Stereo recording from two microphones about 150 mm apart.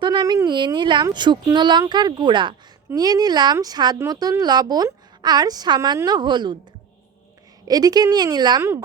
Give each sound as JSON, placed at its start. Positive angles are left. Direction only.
{"t": 0.0, "sound": "speech", "side_deg": -25}
{"t": 7.7, "sound": "speech", "side_deg": -25}